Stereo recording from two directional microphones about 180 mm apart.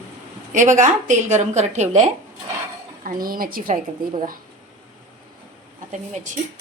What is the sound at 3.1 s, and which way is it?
Speech, 50° right (ahead or behind).